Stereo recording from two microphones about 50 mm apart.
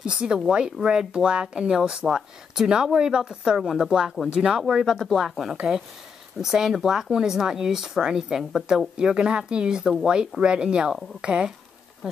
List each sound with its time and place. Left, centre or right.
0.0 s speech: centre
12.0 s speech: centre